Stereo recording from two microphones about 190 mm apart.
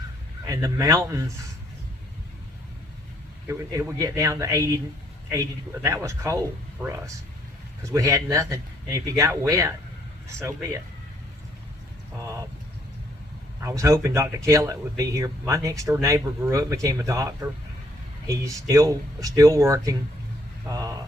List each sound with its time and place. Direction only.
0.4 s speech: 15° right (ahead or behind)
3.4 s speech: 15° right (ahead or behind)
5.8 s speech: 15° right (ahead or behind)
13.6 s speech: 15° right (ahead or behind)
18.7 s speech: 15° right (ahead or behind)
20.7 s vehicle: 15° right (ahead or behind)